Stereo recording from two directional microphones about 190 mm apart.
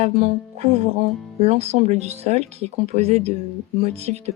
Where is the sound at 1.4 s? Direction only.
35° right (ahead or behind).